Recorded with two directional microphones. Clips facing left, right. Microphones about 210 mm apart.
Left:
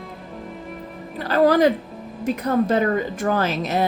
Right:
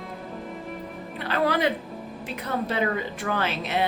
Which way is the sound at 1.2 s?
40° left (ahead or behind).